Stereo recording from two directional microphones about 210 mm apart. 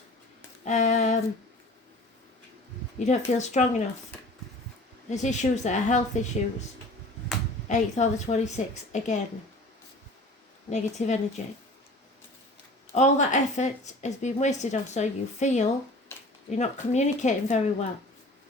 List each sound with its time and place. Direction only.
0.6 s a sound: 35° left (ahead or behind)
3.0 s speech: 35° left (ahead or behind)
5.0 s speech: 35° left (ahead or behind)
7.7 s speech: 35° left (ahead or behind)
10.7 s speech: 35° left (ahead or behind)
12.9 s speech: 35° left (ahead or behind)